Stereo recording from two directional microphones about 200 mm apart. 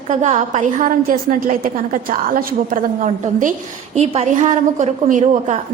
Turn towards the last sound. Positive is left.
turn(degrees=-35)  # may be behind; listen again after turning